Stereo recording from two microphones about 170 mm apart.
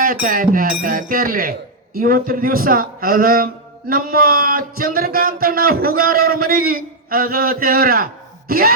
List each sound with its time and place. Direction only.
0.0 s speech: 55° right (ahead or behind)